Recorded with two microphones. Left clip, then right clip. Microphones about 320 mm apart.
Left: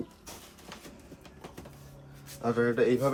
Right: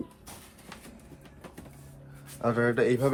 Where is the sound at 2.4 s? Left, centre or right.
Centre.